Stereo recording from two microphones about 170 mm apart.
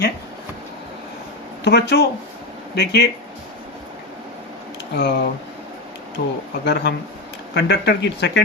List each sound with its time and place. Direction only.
1.6 s speech: 85° left
2.7 s speech: 70° left (ahead or behind)
4.9 s speech: 70° left (ahead or behind)
6.7 s speech: 85° left